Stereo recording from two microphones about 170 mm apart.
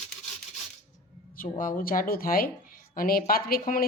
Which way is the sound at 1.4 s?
55° left (ahead or behind).